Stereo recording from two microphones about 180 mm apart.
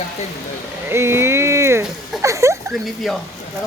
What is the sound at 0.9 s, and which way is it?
Speech, 15° right (ahead or behind).